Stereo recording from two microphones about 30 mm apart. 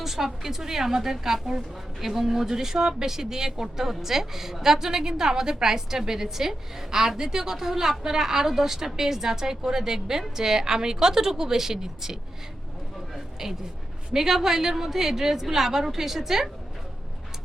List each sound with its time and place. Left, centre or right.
0.0 s a woman's voice: centre
14.1 s a woman's voice: centre